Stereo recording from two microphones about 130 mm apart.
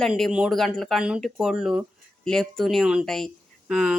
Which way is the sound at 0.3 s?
5° right (ahead or behind).